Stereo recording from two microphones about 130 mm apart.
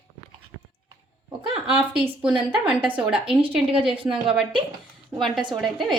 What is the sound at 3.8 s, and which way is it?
Speech, 45° right (ahead or behind).